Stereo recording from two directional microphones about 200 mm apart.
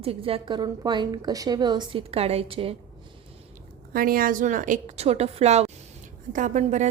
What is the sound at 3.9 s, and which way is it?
A woman's voice, 45° right (ahead or behind).